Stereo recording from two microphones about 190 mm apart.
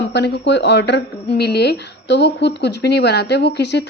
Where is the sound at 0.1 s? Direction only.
65° left (ahead or behind).